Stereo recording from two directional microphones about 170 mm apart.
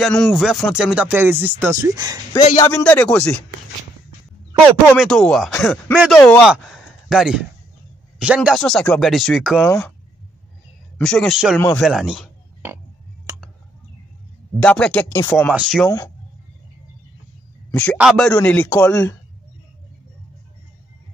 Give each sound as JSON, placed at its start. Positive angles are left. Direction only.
{"t": 0.0, "sound": "speech", "side_deg": 0}
{"t": 2.7, "sound": "speech", "side_deg": 10}
{"t": 4.8, "sound": "speech", "side_deg": 5}
{"t": 5.9, "sound": "speech", "side_deg": 0}
{"t": 9.6, "sound": "speech", "side_deg": 15}
{"t": 11.0, "sound": "speech", "side_deg": 0}
{"t": 13.3, "sound": "clicking", "side_deg": -20}
{"t": 14.6, "sound": "speech", "side_deg": 5}
{"t": 15.5, "sound": "speech", "side_deg": 0}
{"t": 17.6, "sound": "a man's voice", "side_deg": 5}